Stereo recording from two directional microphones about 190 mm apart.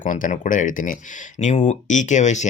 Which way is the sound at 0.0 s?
40° left (ahead or behind).